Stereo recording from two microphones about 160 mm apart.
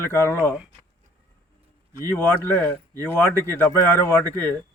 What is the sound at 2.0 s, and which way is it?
Speech, 15° left (ahead or behind).